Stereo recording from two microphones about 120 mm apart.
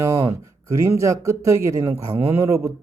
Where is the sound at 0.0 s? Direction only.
25° right (ahead or behind).